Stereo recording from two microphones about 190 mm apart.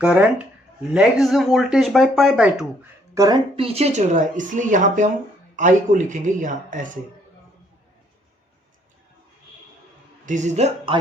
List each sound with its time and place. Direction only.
0.0 s speech: 5° right (ahead or behind)
3.2 s speech: 25° right (ahead or behind); by 6.8 s 40° right (ahead or behind)
10.2 s speech: 40° right (ahead or behind)